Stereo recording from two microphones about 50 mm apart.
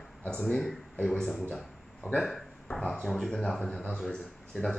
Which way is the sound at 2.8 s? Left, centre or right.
Centre.